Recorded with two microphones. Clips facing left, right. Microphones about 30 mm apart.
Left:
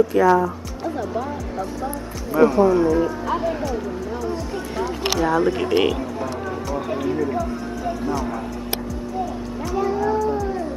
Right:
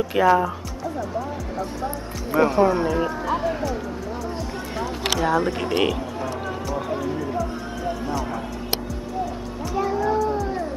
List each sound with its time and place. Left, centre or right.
0.1 s speech: right
2.3 s speech: right
3.3 s speech: centre
5.2 s speech: centre
6.7 s speech: centre
9.8 s music: centre